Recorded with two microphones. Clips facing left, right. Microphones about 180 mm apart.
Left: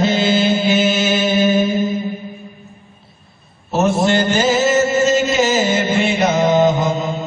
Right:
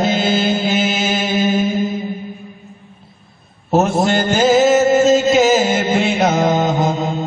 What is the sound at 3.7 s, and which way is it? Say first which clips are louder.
Chant: right 1 dB; 50° right (ahead or behind).